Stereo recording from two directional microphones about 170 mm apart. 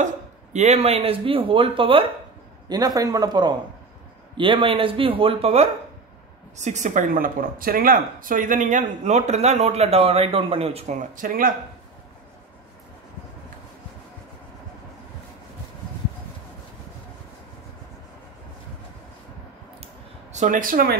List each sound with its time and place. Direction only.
0.0 s speech: 45° right (ahead or behind)
2.7 s a man's voice: 20° right (ahead or behind); by 11.5 s 55° right (ahead or behind)
20.3 s speech: 50° right (ahead or behind)